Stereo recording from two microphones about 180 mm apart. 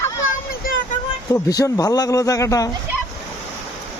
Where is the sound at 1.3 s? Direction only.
20° left (ahead or behind).